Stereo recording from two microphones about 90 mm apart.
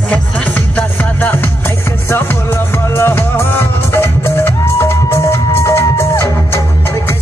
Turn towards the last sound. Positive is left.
turn(degrees=30)  # may be behind; listen again after turning